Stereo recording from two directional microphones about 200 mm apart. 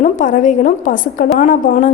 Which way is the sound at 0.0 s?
40° left (ahead or behind).